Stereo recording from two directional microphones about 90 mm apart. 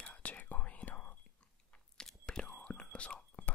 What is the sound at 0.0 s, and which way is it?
Whispering, 15° left (ahead or behind).